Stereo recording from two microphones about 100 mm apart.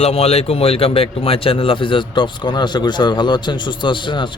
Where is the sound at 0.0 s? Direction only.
90° left.